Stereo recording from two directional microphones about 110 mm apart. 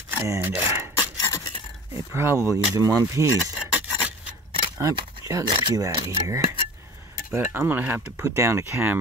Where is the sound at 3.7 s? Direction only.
15° right (ahead or behind).